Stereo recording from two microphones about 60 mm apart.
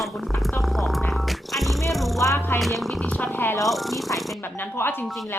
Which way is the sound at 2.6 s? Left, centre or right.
Centre.